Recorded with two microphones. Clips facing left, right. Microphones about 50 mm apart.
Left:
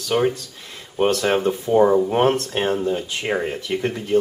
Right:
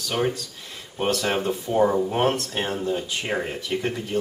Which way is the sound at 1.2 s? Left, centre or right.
Centre.